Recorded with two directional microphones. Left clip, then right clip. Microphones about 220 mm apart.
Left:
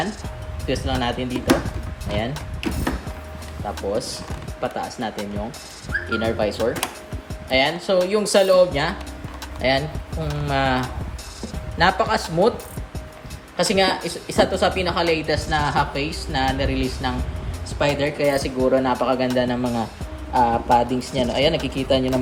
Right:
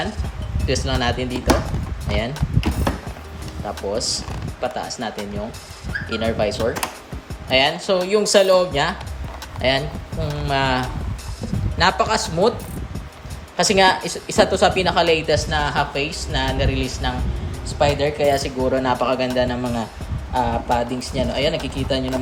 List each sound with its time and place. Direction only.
0.7 s a woman's voice: 5° right (ahead or behind)
3.8 s a woman's voice: 5° right (ahead or behind)
13.6 s a woman's voice: 10° right (ahead or behind)